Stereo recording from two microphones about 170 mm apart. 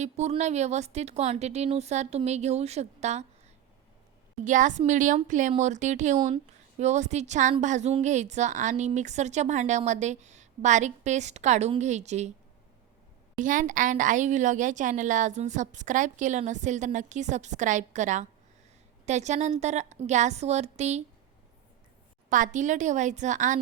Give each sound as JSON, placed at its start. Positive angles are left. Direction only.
{"t": 0.0, "sound": "a woman's voice", "side_deg": -40}
{"t": 13.4, "sound": "a woman's voice", "side_deg": -50}
{"t": 22.3, "sound": "a woman's voice", "side_deg": -50}